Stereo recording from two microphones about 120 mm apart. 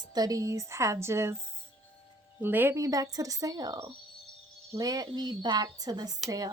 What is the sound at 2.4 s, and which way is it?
A woman's voice, 15° right (ahead or behind).